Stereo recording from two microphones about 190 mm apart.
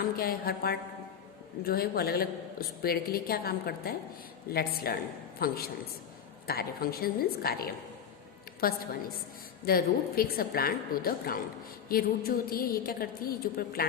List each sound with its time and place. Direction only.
0.0 s a woman's voice: 50° left (ahead or behind)